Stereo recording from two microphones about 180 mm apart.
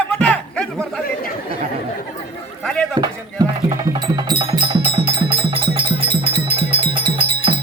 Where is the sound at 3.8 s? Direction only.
25° right (ahead or behind).